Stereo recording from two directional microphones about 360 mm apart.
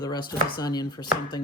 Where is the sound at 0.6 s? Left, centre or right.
Centre.